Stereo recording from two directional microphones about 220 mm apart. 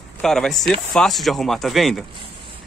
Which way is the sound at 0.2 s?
Centre (ahead or behind).